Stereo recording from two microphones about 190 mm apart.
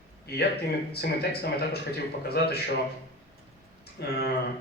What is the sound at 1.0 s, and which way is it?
A man's voice, 60° left (ahead or behind).